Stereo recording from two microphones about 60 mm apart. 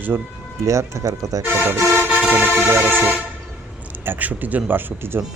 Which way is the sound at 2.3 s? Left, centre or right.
Right.